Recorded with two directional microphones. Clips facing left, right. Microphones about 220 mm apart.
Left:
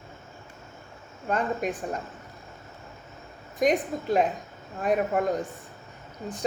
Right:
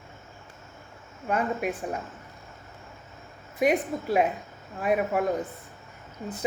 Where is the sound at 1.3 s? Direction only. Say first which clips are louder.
Even; 10° right (ahead or behind).